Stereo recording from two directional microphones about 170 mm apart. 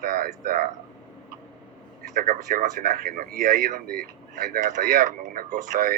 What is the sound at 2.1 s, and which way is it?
Speech, 50° right (ahead or behind).